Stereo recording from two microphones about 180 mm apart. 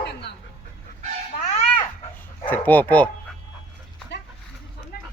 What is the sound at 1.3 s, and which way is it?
Babbling, 55° left (ahead or behind).